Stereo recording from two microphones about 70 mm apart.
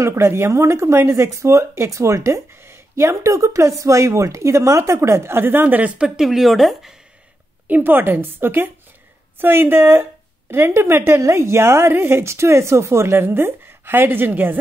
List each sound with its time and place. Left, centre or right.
0.0 s speech: right; by 7.0 s centre
7.6 s a woman's voice: right